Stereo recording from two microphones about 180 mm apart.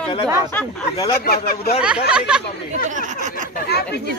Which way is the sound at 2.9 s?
45° right (ahead or behind).